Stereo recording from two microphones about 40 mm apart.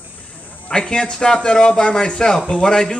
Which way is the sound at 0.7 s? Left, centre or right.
Centre.